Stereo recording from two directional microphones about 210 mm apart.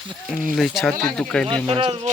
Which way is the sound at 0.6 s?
Centre (ahead or behind).